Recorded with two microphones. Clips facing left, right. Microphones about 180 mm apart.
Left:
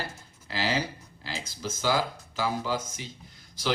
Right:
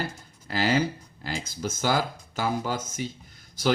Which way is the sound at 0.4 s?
50° right (ahead or behind).